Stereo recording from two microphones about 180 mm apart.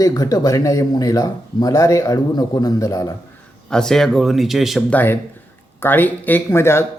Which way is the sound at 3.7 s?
5° left (ahead or behind).